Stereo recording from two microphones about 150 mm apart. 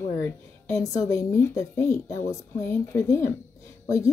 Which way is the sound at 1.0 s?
20° left (ahead or behind).